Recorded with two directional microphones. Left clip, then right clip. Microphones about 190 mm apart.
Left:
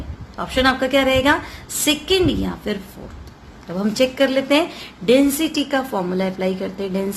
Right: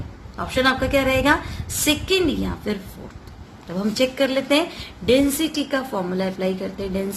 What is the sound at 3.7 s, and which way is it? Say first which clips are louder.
A woman's voice: left 3 dB; 10° left (ahead or behind).